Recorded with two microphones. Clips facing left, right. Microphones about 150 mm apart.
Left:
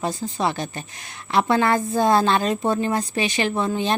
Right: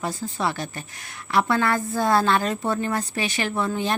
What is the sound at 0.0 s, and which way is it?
A woman's voice, 20° left (ahead or behind).